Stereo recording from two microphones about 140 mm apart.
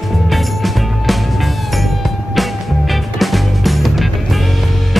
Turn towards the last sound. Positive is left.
turn(degrees=0)  # may be behind; listen again after turning